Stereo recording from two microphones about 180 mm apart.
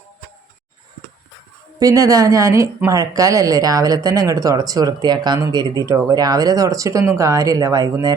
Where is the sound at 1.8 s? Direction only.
20° right (ahead or behind).